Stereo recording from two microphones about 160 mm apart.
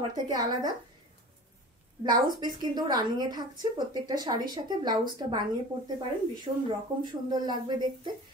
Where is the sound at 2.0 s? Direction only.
25° right (ahead or behind).